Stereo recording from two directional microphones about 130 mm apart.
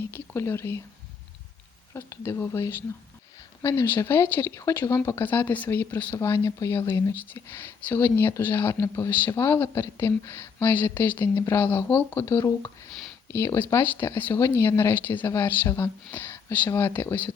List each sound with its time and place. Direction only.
0.1 s speech: 20° left (ahead or behind)
1.9 s speech: 20° left (ahead or behind)